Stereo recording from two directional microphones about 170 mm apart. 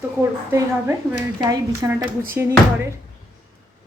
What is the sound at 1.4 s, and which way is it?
Speech, 20° right (ahead or behind).